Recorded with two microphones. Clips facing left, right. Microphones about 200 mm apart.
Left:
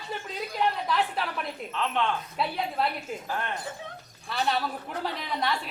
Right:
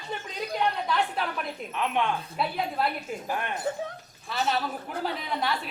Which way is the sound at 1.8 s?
15° right (ahead or behind).